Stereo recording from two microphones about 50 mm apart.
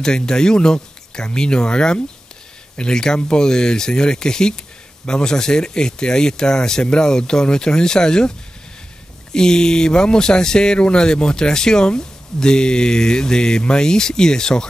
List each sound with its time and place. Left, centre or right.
0.0 s speech: centre